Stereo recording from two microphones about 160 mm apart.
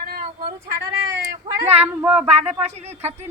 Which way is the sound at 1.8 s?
10° right (ahead or behind).